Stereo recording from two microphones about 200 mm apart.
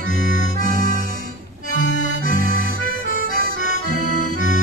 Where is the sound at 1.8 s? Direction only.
50° right (ahead or behind).